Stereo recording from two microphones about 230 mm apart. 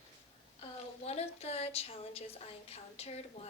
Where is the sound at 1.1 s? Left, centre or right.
Left.